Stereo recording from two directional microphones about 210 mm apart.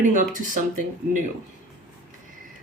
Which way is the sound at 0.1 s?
40° right (ahead or behind).